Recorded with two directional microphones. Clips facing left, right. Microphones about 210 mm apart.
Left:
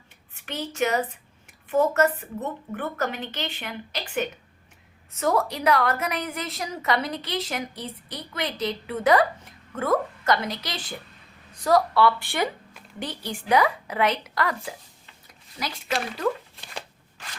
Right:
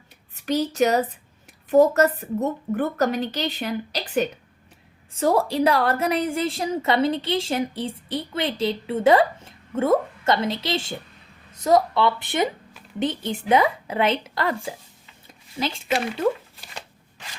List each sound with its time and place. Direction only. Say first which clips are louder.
0.3 s a woman's voice: right 7 dB; 35° right (ahead or behind)